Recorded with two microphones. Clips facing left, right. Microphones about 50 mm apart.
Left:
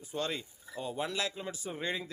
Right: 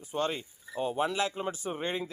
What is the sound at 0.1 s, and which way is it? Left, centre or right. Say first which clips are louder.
Speech: right 4 dB; right.